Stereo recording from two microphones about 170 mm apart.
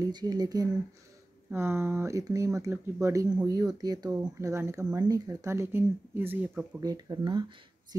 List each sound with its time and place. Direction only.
0.0 s speech: 25° right (ahead or behind)
6.8 s speech: 25° right (ahead or behind)